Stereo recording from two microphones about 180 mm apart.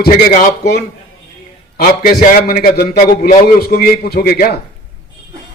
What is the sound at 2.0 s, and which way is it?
A man's voice, 50° left (ahead or behind).